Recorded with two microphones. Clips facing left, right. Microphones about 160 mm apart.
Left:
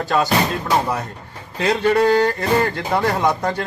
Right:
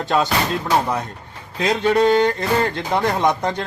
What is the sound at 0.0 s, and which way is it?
Speech, 25° right (ahead or behind).